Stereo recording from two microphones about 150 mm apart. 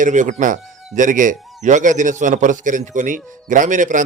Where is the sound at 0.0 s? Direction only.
55° right (ahead or behind).